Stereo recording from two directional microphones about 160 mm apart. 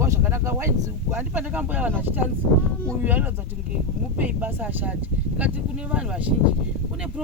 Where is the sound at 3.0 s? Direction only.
10° right (ahead or behind).